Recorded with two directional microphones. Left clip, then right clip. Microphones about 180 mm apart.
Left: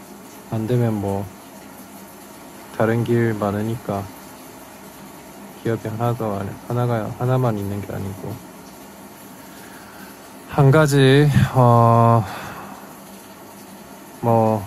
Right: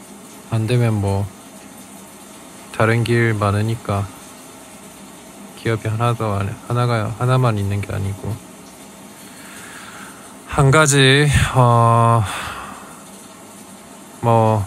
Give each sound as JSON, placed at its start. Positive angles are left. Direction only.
{"t": 0.5, "sound": "speech", "side_deg": -30}
{"t": 2.8, "sound": "speech", "side_deg": -30}
{"t": 5.6, "sound": "speech", "side_deg": -30}
{"t": 10.5, "sound": "speech", "side_deg": -20}
{"t": 14.2, "sound": "speech", "side_deg": -30}